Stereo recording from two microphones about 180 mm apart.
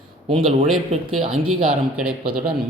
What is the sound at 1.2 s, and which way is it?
Speech, 30° right (ahead or behind).